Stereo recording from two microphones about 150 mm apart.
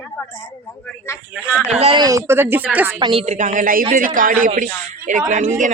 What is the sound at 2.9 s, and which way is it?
Speech, 35° right (ahead or behind).